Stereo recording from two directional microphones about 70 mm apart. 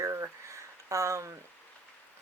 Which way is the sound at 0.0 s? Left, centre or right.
Right.